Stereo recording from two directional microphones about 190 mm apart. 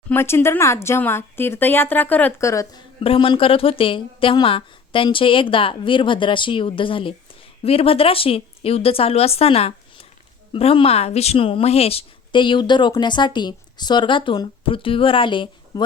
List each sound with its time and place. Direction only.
0.1 s speech: 10° left (ahead or behind)
3.0 s speech: 30° left (ahead or behind)